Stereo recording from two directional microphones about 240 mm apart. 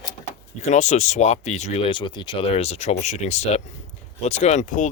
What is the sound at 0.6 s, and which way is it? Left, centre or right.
Speech, left.